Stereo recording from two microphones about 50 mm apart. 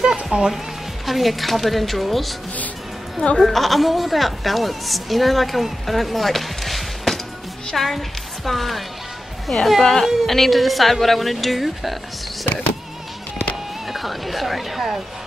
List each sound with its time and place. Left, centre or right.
0.0 s music: centre
1.0 s a woman's voice: centre
3.3 s a woman's voice: centre
13.8 s speech: centre